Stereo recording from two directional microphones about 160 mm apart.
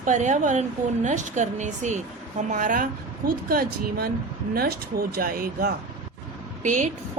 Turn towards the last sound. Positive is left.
turn(degrees=-50)  # may be behind; listen again after turning